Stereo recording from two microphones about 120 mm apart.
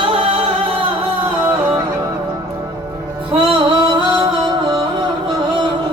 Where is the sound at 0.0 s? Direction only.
50° right (ahead or behind).